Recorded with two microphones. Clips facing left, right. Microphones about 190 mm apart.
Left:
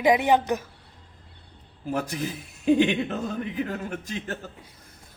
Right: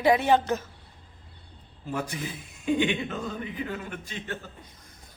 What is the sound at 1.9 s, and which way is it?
Speech, 40° left (ahead or behind).